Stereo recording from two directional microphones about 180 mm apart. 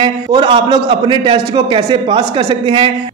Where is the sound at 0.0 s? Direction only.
25° right (ahead or behind).